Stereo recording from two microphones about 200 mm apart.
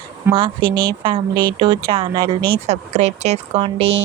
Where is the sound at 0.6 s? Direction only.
45° right (ahead or behind).